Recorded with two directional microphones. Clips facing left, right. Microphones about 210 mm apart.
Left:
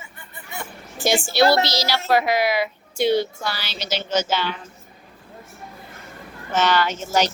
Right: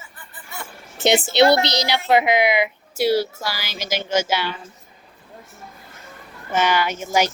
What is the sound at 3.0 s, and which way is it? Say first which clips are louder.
A woman's voice: even; 5° right (ahead or behind).